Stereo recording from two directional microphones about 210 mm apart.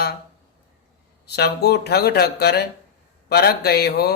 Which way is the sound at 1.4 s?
50° left (ahead or behind).